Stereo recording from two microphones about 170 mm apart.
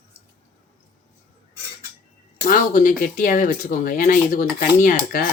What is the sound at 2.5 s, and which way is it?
Speech, 50° left (ahead or behind).